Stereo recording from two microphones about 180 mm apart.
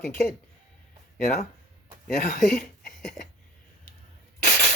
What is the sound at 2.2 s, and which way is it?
Speech, 45° left (ahead or behind).